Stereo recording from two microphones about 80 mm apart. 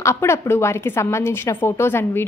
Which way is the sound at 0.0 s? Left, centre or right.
Left.